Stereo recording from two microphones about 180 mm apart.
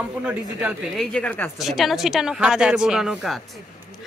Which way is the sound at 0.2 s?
5° right (ahead or behind).